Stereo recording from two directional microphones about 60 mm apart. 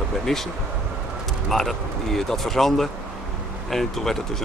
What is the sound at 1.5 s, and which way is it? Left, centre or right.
Speech, centre.